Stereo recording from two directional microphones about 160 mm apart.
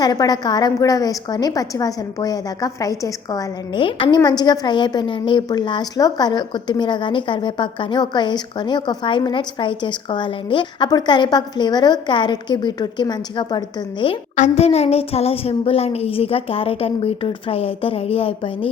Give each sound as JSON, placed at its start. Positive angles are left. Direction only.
{"t": 0.0, "sound": "a woman's voice", "side_deg": 25}
{"t": 14.3, "sound": "a woman's voice", "side_deg": 45}